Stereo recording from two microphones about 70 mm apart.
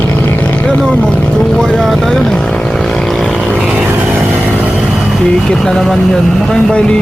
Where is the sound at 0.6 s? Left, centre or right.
Centre.